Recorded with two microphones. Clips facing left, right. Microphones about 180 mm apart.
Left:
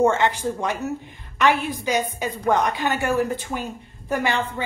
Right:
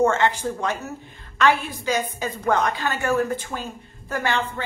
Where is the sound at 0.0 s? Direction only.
15° left (ahead or behind).